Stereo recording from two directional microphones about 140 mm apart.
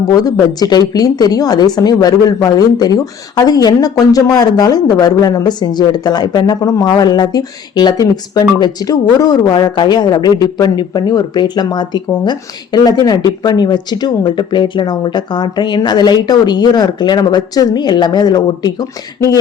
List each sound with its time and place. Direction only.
0.0 s a woman's voice: 25° left (ahead or behind)